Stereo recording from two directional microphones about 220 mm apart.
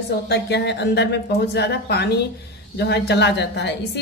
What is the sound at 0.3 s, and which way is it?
Speech, 50° left (ahead or behind).